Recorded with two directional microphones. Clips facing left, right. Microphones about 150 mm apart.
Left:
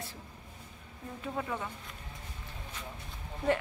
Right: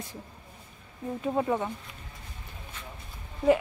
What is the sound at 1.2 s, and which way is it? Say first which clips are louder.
Speech: right 9 dB; 30° right (ahead or behind).